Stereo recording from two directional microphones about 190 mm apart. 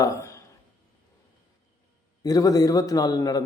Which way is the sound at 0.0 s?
15° left (ahead or behind).